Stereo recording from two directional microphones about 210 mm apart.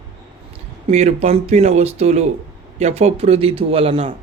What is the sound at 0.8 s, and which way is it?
Speech, 30° right (ahead or behind).